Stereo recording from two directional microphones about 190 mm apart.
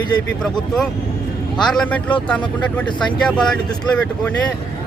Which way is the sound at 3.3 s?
5° left (ahead or behind).